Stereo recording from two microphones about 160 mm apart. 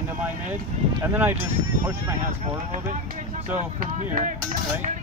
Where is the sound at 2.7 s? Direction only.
55° right (ahead or behind).